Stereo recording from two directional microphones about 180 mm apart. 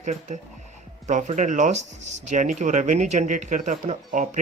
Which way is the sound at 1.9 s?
90° right.